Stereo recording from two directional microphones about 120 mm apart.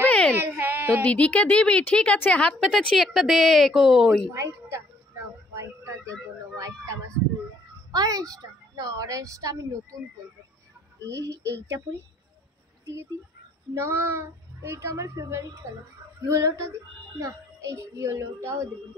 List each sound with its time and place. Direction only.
0.0 s baby cry: 10° left (ahead or behind)
0.5 s baby cry: 15° right (ahead or behind)
1.0 s speech: 10° left (ahead or behind)
4.3 s a woman's voice: 25° right (ahead or behind)
5.5 s a sound: 25° right (ahead or behind)
7.9 s a woman's voice: 30° right (ahead or behind)
11.1 s a woman's voice: 25° right (ahead or behind)
13.7 s a woman's voice: 20° right (ahead or behind)